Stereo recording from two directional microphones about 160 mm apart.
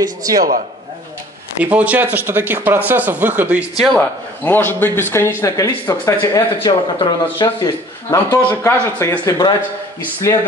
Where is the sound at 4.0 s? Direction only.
10° left (ahead or behind).